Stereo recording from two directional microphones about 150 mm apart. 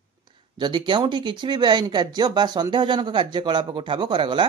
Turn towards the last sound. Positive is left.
turn(degrees=-35)  # may be behind; listen again after turning